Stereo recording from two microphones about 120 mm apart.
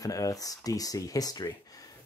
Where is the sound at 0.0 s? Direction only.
30° left (ahead or behind).